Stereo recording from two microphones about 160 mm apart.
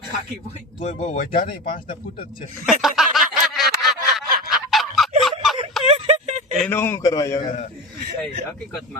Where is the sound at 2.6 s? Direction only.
Centre (ahead or behind).